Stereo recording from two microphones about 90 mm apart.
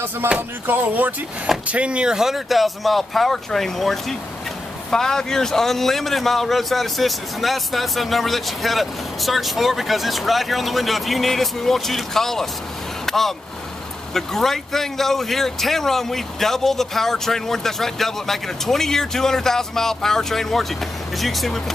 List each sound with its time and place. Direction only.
0.3 s music: 20° right (ahead or behind)
1.7 s speech: 10° right (ahead or behind); by 12.4 s 5° left (ahead or behind)
13.0 s vehicle: 5° left (ahead or behind)
14.1 s speech: 5° left (ahead or behind)